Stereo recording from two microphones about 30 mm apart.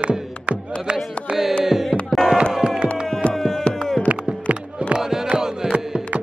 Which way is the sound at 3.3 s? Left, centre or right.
Centre.